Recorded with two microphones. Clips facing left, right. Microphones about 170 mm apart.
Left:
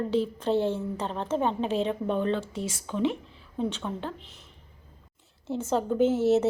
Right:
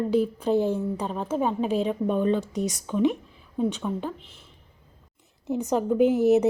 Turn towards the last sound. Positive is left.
turn(degrees=-15)  # may be behind; listen again after turning